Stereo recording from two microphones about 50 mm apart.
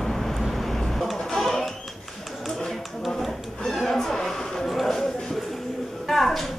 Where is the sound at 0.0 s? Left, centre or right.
Centre.